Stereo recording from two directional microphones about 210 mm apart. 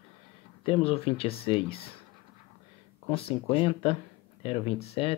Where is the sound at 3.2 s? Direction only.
25° left (ahead or behind).